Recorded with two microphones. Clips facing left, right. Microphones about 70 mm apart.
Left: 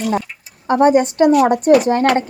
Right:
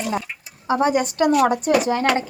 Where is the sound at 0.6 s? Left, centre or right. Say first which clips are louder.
Left 7 dB; left.